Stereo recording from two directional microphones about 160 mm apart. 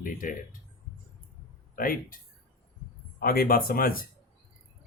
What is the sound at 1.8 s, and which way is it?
Speech, 60° left (ahead or behind).